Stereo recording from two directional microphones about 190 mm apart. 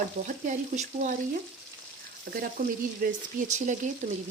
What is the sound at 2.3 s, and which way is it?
Speech, 50° right (ahead or behind).